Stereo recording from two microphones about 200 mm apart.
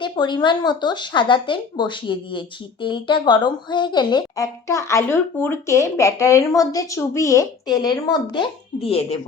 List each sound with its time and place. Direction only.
0.0 s a woman's voice: 20° left (ahead or behind)